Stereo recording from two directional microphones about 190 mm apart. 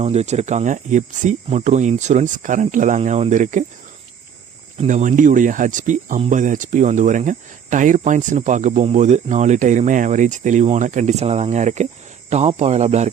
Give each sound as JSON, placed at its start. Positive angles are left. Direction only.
{"t": 0.0, "sound": "speech", "side_deg": -35}
{"t": 4.8, "sound": "speech", "side_deg": -40}